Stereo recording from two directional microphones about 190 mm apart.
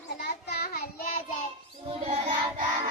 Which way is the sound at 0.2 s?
60° left (ahead or behind).